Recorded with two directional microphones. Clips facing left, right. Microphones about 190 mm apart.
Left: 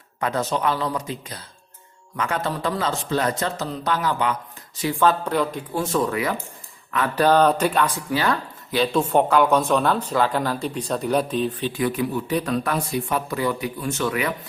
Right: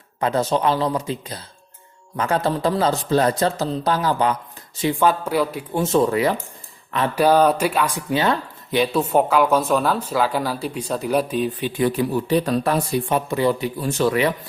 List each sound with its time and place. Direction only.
0.2 s speech: 30° right (ahead or behind)
4.8 s speech: 15° right (ahead or behind)
5.7 s speech: 25° right (ahead or behind)
7.2 s speech: 10° right (ahead or behind)
8.1 s speech: 20° right (ahead or behind)
8.9 s speech: 5° right (ahead or behind)
11.8 s speech: 30° right (ahead or behind)